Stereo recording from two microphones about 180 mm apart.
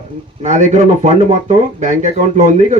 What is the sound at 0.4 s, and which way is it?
A man's voice, 40° right (ahead or behind).